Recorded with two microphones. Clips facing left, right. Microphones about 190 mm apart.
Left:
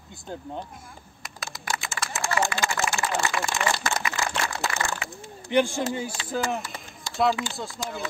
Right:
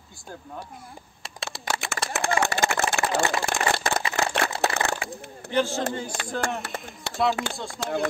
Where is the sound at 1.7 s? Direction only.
65° right (ahead or behind).